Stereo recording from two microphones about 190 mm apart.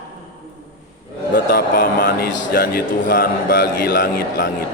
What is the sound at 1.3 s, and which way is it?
A man's voice, 50° left (ahead or behind).